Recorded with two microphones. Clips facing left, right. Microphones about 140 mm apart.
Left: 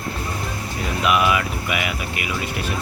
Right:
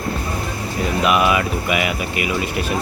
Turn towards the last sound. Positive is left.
turn(degrees=-40)  # may be behind; listen again after turning